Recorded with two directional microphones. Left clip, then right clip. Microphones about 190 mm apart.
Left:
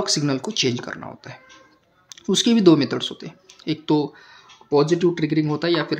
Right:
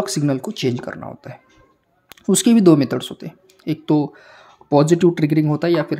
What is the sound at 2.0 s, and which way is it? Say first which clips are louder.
Speech: right 2 dB; 40° right (ahead or behind).